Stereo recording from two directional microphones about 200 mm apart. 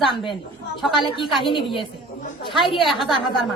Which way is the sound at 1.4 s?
25° left (ahead or behind).